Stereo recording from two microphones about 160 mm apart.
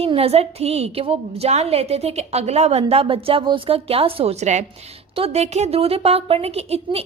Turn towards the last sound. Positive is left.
turn(degrees=-40)  # may be behind; listen again after turning